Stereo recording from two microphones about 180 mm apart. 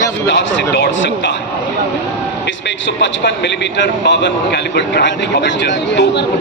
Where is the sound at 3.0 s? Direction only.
75° left (ahead or behind).